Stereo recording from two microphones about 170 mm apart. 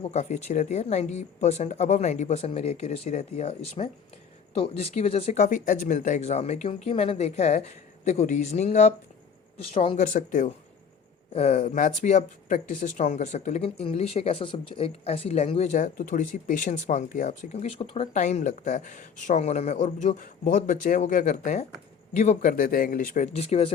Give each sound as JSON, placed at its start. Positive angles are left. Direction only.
{"t": 0.0, "sound": "speech", "side_deg": 45}
{"t": 10.0, "sound": "speech", "side_deg": 50}